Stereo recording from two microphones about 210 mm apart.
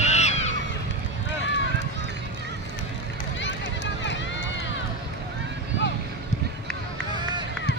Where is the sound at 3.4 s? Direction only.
60° left (ahead or behind).